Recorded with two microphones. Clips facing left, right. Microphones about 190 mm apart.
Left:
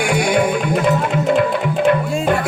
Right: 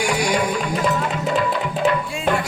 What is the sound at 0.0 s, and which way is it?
Music, 55° left (ahead or behind).